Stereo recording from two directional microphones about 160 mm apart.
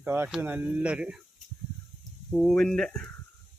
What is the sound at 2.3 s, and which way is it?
Speech, 5° left (ahead or behind).